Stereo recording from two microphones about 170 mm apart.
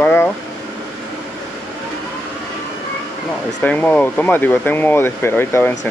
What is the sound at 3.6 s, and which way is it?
Speech, 10° left (ahead or behind).